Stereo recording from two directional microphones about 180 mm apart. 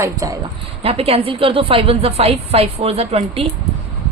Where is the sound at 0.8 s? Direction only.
35° right (ahead or behind).